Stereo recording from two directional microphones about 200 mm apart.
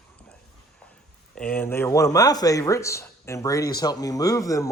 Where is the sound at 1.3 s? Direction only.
5° left (ahead or behind).